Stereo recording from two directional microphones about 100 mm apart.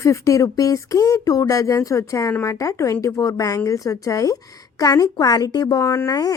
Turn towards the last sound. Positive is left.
turn(degrees=35)  # may be behind; listen again after turning